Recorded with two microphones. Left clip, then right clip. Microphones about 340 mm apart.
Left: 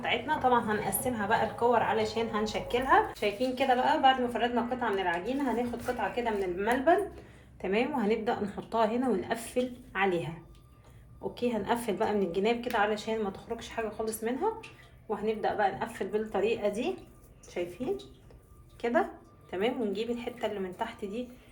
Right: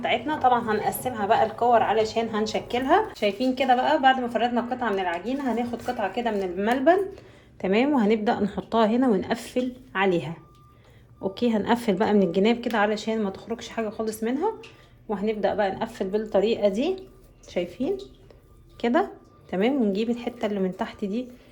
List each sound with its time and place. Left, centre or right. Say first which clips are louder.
0.0 s a woman's voice: right 6 dB; right
11.3 s a woman's voice: right 6 dB; right